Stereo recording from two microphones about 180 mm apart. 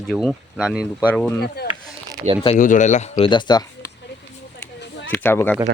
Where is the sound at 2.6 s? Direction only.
45° left (ahead or behind).